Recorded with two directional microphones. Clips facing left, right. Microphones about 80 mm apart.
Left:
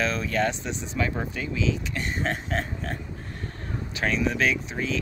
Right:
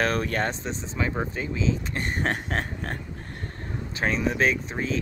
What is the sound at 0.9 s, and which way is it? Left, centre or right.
Speech, right.